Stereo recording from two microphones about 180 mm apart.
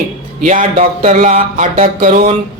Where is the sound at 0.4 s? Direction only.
45° right (ahead or behind).